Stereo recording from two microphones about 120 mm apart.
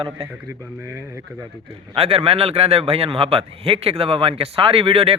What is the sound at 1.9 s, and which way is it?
A man's voice, 55° right (ahead or behind).